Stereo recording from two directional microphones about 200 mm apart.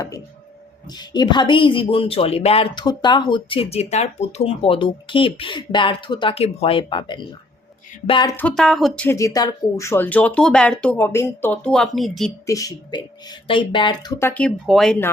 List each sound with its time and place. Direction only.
0.9 s speech: 20° left (ahead or behind)
8.4 s speech: 5° left (ahead or behind)
9.0 s speech: 15° left (ahead or behind); by 12.3 s centre (ahead or behind)
12.5 s speech: 15° left (ahead or behind)